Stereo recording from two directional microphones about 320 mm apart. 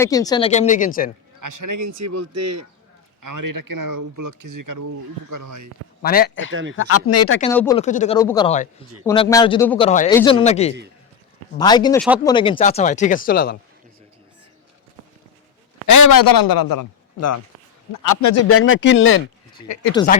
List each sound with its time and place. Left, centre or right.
0.0 s speech: centre
1.4 s speech: right
3.2 s speech: right
6.0 s speech: left
6.5 s speech: right
6.7 s speech: left
7.5 s speech: centre
7.8 s speech: left
8.2 s speech: centre; by 13.6 s left
15.9 s a man's voice: left
17.2 s speech: left
17.9 s a man's voice: left
18.4 s speech: left